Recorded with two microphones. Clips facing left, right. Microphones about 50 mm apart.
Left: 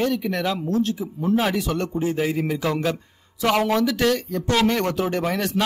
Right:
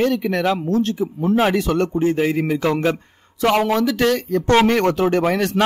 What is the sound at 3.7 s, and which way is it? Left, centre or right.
Speech, right.